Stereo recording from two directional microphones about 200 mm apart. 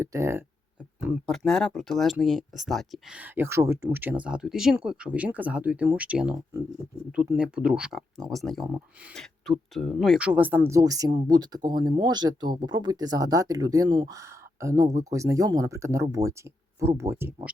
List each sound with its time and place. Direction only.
0.0 s speech: 15° right (ahead or behind)